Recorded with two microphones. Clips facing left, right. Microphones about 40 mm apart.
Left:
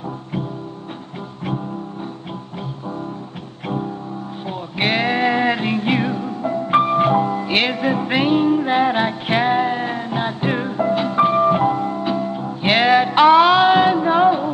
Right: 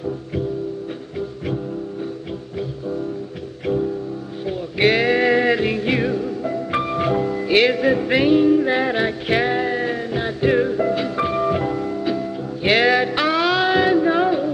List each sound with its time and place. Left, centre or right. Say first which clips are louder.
4.5 s music: right 4 dB; centre